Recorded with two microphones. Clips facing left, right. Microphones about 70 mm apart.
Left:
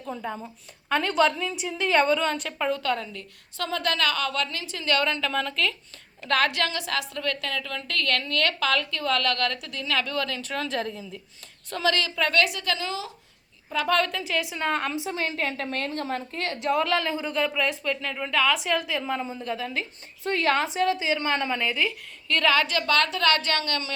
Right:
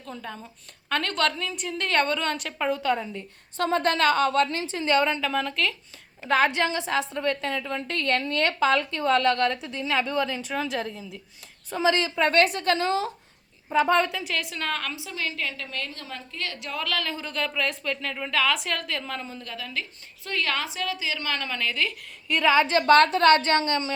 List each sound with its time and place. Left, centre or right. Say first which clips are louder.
0.0 s a woman's voice: left 5 dB; centre; by 3.7 s right
3.7 s a woman's voice: right 4 dB; right
5.2 s speech: even; centre
6.2 s a woman's voice: right 2 dB; centre
11.7 s a woman's voice: right 2 dB; right
13.8 s a woman's voice: even; centre
14.1 s a woman's voice: left 1 dB; centre
14.5 s a woman's voice: left 4 dB; left
22.3 s a woman's voice: right 2 dB; centre